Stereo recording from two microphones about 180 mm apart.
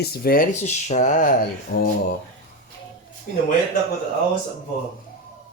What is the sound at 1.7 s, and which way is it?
Speech, 55° left (ahead or behind).